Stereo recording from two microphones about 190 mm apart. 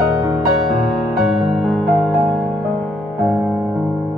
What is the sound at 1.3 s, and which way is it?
Music, centre (ahead or behind).